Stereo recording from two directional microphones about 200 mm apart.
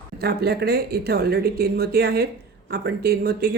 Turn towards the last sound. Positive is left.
turn(degrees=-50)  # may be behind; listen again after turning